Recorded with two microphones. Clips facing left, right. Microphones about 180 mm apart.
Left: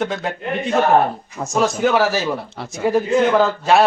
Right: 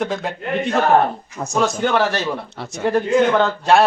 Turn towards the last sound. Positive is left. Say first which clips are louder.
# left 1 dB
turn(degrees=0)  # may be behind; listen again after turning